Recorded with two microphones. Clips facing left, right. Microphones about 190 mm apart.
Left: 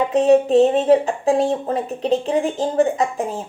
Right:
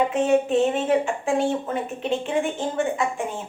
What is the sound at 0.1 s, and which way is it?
Speech, 35° left (ahead or behind).